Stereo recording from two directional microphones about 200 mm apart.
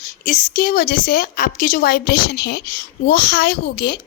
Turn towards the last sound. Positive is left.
turn(degrees=55)  # may be behind; listen again after turning